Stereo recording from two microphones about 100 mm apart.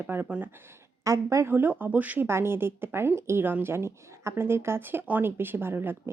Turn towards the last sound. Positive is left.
turn(degrees=-20)  # may be behind; listen again after turning